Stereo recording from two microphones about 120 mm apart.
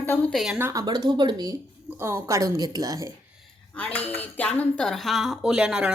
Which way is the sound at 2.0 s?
20° right (ahead or behind).